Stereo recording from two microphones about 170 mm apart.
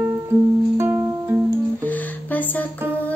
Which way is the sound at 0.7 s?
15° right (ahead or behind).